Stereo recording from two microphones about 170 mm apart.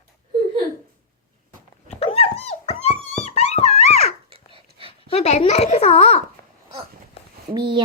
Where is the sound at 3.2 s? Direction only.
40° left (ahead or behind).